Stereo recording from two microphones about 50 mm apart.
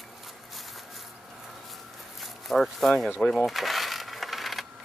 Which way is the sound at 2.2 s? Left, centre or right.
Centre.